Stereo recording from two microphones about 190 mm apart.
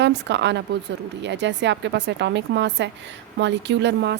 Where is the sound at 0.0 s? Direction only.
65° right (ahead or behind).